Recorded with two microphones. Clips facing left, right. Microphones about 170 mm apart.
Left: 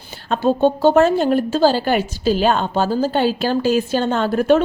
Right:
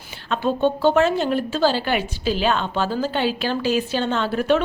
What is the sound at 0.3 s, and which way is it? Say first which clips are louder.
A woman's voice: left 4 dB; 40° left (ahead or behind).